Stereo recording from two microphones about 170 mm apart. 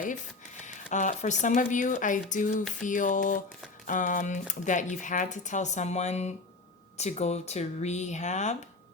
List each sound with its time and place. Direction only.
0.6 s speech: 45° left (ahead or behind)